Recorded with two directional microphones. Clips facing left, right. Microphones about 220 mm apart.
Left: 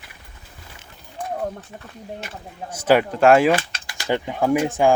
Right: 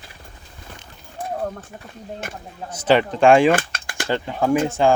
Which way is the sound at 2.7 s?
10° left (ahead or behind).